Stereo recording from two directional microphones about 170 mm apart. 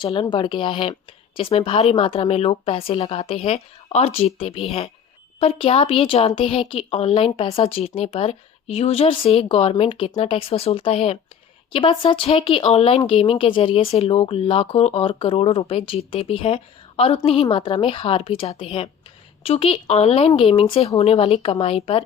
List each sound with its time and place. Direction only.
0.0 s speech: 30° left (ahead or behind)